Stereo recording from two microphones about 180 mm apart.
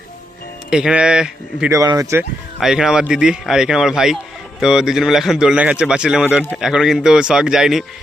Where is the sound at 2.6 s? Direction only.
Centre (ahead or behind).